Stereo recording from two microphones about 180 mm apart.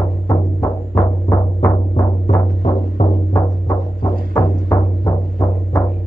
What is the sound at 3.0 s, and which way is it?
Music, 35° left (ahead or behind).